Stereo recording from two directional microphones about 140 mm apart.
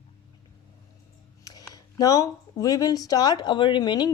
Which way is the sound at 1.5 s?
25° left (ahead or behind).